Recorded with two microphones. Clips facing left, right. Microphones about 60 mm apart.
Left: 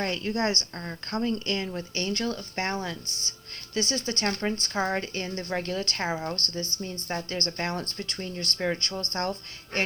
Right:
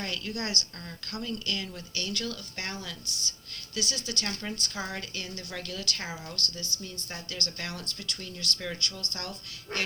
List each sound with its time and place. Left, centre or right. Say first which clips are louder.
0.0 s speech: left 7 dB; left